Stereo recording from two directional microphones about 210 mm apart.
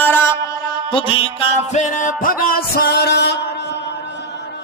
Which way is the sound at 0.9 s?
25° left (ahead or behind).